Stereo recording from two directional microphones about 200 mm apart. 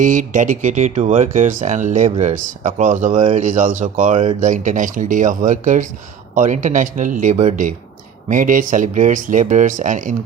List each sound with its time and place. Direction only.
0.0 s speech: 40° right (ahead or behind)
3.2 s speech: 25° right (ahead or behind)
3.4 s speech: 40° right (ahead or behind)